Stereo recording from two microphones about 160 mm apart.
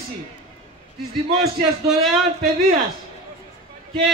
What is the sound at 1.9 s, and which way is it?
Speech, centre (ahead or behind).